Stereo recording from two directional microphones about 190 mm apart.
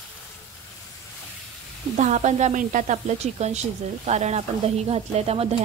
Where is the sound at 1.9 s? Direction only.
40° right (ahead or behind).